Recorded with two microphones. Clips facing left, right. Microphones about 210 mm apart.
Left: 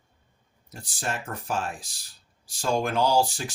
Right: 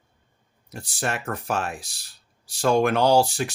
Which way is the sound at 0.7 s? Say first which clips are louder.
Right 4 dB; 65° right (ahead or behind).